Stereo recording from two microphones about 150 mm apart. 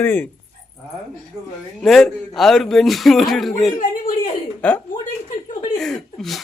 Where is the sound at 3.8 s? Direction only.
70° left (ahead or behind).